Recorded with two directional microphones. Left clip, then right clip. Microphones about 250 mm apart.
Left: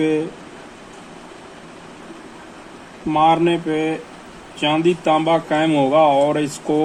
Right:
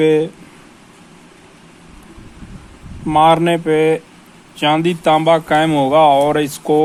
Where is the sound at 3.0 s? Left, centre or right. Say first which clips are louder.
Right 4 dB; right.